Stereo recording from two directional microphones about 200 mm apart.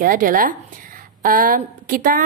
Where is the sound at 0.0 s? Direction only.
45° right (ahead or behind).